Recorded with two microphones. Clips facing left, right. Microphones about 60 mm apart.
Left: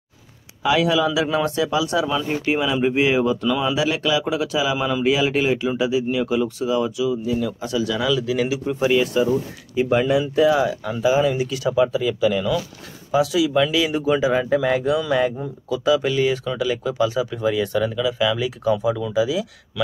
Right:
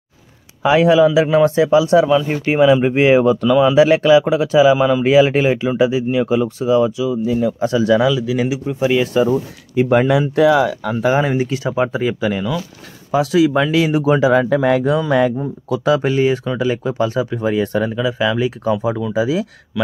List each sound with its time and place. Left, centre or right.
0.6 s speech: right
4.7 s speech: right
5.0 s speech: right
8.1 s speech: centre
9.0 s speech: right
9.8 s speech: right
14.9 s speech: right